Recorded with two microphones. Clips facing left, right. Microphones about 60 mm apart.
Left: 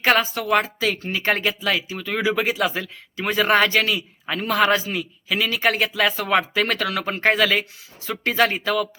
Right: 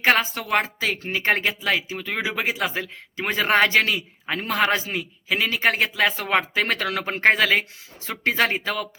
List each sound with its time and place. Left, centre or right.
0.0 s speech: right